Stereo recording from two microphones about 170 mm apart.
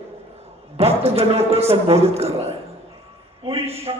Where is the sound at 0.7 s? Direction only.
35° right (ahead or behind).